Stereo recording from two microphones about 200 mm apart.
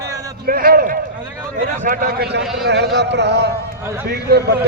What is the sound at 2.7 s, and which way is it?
Speech, 55° right (ahead or behind).